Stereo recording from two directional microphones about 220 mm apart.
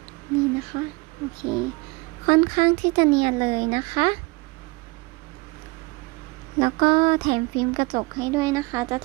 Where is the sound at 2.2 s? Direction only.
25° right (ahead or behind).